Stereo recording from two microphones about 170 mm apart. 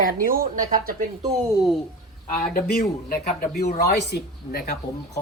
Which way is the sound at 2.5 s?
60° left (ahead or behind).